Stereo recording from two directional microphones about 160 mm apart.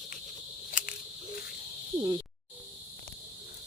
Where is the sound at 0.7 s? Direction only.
55° left (ahead or behind).